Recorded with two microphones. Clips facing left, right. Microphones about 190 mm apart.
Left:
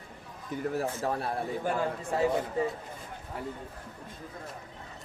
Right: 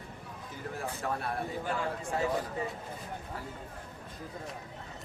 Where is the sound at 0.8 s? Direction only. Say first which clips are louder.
Even; 30° left (ahead or behind).